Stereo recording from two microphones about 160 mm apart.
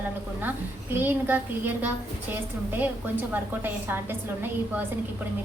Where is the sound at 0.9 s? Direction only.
10° right (ahead or behind).